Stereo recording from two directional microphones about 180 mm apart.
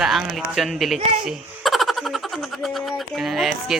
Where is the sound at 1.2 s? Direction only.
Centre (ahead or behind).